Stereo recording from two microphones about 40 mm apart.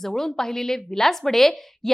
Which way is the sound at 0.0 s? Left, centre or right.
Centre.